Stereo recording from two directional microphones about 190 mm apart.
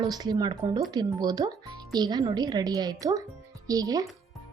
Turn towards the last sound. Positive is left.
turn(degrees=-20)  # may be behind; listen again after turning